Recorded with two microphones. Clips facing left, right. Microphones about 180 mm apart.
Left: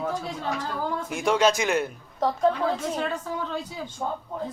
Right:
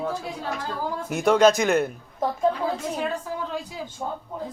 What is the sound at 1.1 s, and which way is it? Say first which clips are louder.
Speech: right 5 dB; 45° right (ahead or behind).